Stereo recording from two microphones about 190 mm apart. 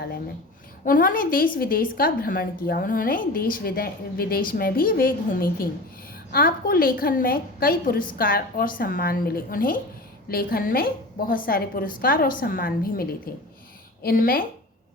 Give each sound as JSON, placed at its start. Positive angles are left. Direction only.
{"t": 0.9, "sound": "a woman's voice", "side_deg": 45}